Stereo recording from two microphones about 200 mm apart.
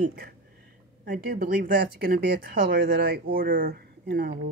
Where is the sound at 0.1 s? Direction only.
50° right (ahead or behind).